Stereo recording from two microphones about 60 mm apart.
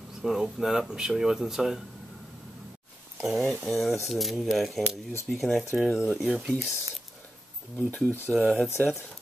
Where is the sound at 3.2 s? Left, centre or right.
Centre.